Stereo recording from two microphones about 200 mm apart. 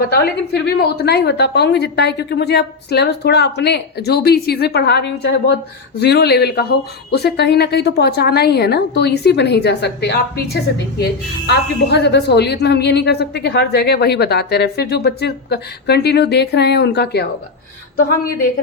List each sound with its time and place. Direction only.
0.1 s a woman's voice: 50° left (ahead or behind)
11.9 s a woman's voice: 55° left (ahead or behind)